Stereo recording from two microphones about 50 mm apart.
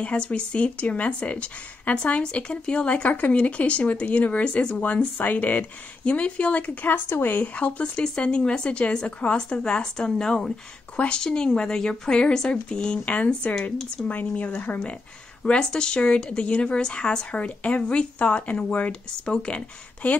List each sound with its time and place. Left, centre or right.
0.0 s speech: left
6.9 s speech: left
15.4 s speech: centre